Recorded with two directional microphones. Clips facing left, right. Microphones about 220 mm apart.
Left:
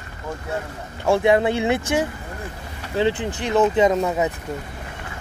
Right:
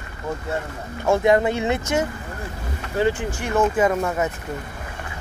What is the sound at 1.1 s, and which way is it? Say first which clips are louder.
Speech: even; 15° left (ahead or behind).